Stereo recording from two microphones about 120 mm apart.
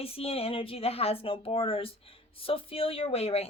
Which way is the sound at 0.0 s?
55° left (ahead or behind).